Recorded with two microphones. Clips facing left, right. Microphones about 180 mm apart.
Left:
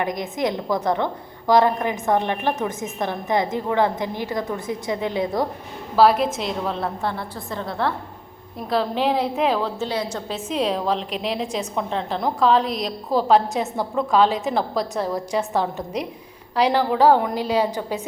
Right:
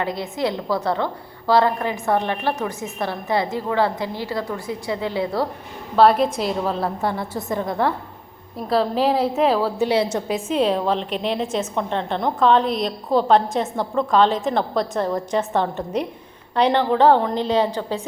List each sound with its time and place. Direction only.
0.0 s a woman's voice: 15° left (ahead or behind)
6.0 s a woman's voice: 5° left (ahead or behind)
7.0 s a woman's voice: 15° right (ahead or behind)
8.7 s a woman's voice: centre (ahead or behind)
10.5 s a woman's voice: centre (ahead or behind)